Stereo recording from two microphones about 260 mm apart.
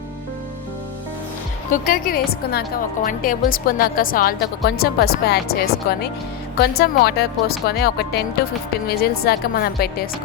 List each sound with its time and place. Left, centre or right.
1.9 s a woman's voice: left